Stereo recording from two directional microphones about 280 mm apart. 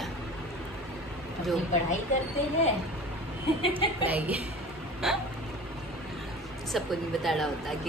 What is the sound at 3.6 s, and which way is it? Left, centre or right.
Chuckle, centre.